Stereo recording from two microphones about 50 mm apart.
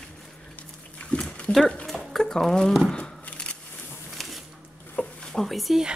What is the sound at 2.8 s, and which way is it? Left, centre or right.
Tearing, centre.